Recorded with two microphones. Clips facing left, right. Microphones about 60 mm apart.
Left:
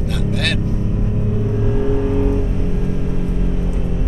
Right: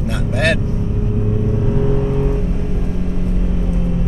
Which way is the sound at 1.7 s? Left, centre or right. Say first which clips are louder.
Even; centre.